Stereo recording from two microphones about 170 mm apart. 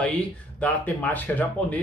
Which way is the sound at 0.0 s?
10° left (ahead or behind).